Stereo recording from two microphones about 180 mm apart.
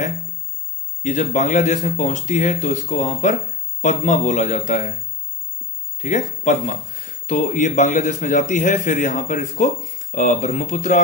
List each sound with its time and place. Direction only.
1.0 s a man's voice: 45° left (ahead or behind)
5.9 s a man's voice: 45° left (ahead or behind)